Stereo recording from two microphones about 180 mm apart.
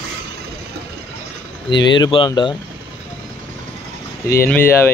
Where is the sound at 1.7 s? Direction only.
25° left (ahead or behind).